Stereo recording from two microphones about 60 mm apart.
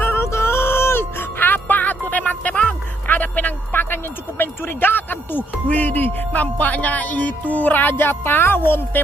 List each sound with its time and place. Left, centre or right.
0.0 s music: left
5.7 s a child's voice: left